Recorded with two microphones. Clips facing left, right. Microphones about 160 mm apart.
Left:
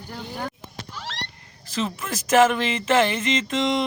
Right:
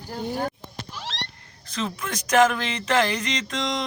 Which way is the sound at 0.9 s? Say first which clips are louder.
Even; 20° right (ahead or behind).